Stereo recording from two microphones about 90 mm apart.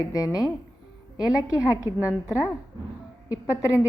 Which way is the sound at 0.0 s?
45° left (ahead or behind).